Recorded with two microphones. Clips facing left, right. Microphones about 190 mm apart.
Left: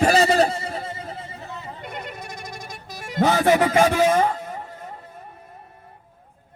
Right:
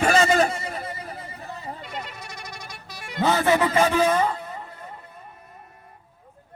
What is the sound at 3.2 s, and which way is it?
Music, 15° left (ahead or behind).